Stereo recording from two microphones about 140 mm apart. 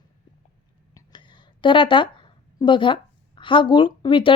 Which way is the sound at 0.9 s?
35° left (ahead or behind).